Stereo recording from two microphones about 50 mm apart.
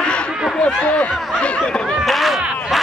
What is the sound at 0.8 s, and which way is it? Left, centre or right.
Speech, left.